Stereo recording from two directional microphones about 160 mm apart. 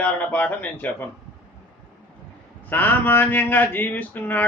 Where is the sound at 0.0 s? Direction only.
10° left (ahead or behind).